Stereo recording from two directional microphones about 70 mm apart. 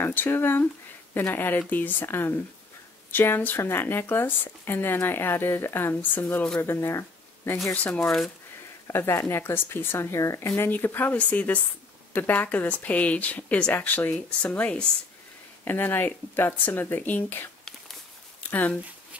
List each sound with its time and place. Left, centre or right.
0.0 s speech: left
7.7 s speech: left
8.8 s speech: left
11.1 s speech: centre
15.6 s speech: left